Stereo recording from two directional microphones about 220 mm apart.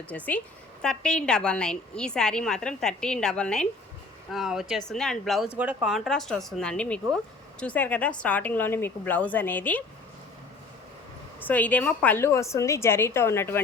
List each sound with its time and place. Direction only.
0.1 s a woman's voice: 5° left (ahead or behind)
11.3 s a woman's voice: 10° left (ahead or behind)